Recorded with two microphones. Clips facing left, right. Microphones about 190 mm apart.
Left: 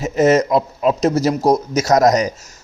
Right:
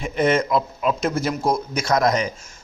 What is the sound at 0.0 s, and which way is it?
Speech, 40° left (ahead or behind).